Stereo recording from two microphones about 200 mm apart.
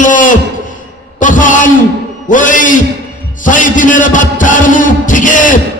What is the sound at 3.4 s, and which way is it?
Music, 40° left (ahead or behind).